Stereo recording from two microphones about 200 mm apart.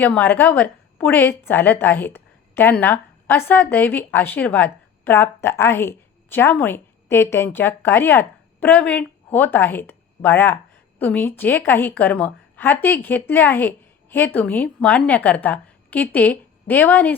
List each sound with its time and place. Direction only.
0.0 s a woman's voice: 10° left (ahead or behind)